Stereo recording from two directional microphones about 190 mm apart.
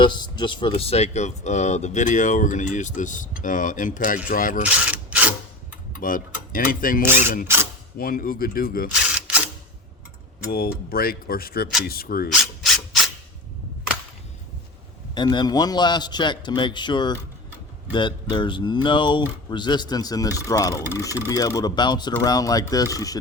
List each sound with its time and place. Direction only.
0.0 s speech: 25° left (ahead or behind); by 4.6 s 45° left (ahead or behind)
4.9 s a sound: 5° right (ahead or behind)
6.0 s speech: 45° left (ahead or behind)
9.1 s camera: 5° right (ahead or behind)
10.4 s speech: 50° left (ahead or behind)
12.6 s rub: centre (ahead or behind)
15.1 s speech: 25° left (ahead or behind)